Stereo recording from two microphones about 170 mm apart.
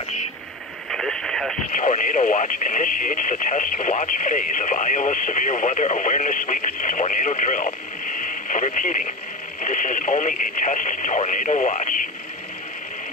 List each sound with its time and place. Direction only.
0.8 s radio: centre (ahead or behind)
1.7 s speech: 50° left (ahead or behind)